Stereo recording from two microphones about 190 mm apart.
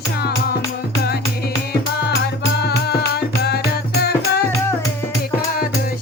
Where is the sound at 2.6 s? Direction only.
60° left (ahead or behind).